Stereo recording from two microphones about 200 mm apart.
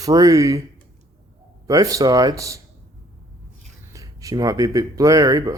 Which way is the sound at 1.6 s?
15° right (ahead or behind).